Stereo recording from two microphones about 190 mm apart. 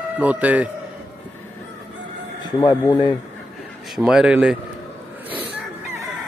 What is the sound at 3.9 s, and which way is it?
Speech, 5° right (ahead or behind).